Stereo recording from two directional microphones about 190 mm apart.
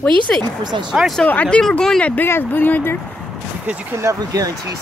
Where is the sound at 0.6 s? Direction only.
25° right (ahead or behind).